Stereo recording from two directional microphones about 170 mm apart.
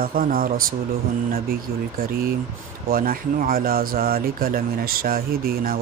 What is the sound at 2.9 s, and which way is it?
Speech, 55° right (ahead or behind).